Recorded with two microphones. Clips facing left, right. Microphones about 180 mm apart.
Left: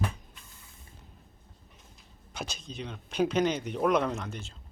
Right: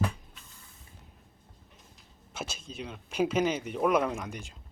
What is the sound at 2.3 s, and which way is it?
Speech, 5° right (ahead or behind).